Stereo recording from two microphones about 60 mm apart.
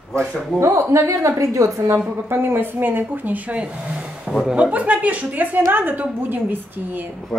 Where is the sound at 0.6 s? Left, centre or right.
Right.